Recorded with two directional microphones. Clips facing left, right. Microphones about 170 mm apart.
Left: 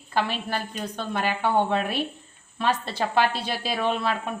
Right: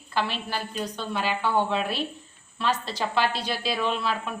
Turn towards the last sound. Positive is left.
turn(degrees=50)  # may be behind; listen again after turning